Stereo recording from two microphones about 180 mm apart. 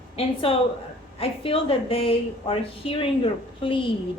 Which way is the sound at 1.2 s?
30° left (ahead or behind).